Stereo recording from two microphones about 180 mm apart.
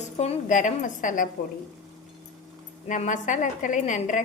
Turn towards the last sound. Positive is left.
turn(degrees=45)  # may be behind; listen again after turning